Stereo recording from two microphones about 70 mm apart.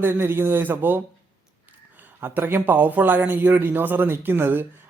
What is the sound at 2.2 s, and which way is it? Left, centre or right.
A man's voice, right.